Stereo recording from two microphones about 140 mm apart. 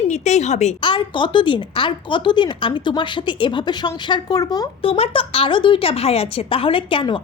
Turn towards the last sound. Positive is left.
turn(degrees=40)  # may be behind; listen again after turning